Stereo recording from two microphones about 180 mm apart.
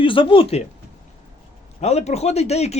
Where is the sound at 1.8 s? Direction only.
35° left (ahead or behind).